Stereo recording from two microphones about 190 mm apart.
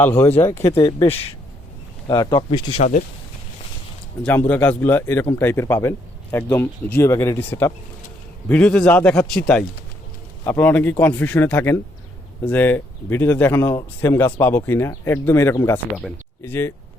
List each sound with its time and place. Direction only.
0.5 s speech: 15° left (ahead or behind)
0.8 s speech: 25° left (ahead or behind)
4.2 s a man's voice: 10° left (ahead or behind)